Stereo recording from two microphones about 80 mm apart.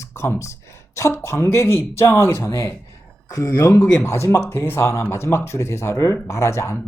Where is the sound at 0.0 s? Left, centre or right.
Left.